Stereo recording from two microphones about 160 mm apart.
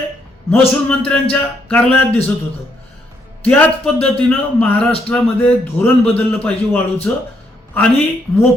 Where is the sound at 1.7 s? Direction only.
5° left (ahead or behind).